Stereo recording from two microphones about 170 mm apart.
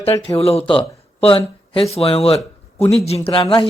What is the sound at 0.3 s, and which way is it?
Speech, 35° left (ahead or behind).